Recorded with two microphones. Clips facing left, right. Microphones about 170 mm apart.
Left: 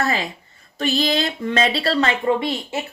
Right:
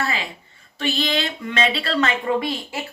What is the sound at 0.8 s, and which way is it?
Speech, 40° left (ahead or behind).